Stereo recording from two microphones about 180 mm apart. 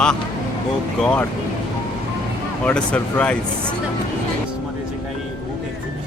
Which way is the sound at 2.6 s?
5° left (ahead or behind).